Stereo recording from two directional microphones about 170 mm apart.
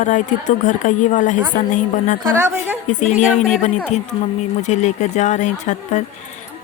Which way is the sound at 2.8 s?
45° left (ahead or behind).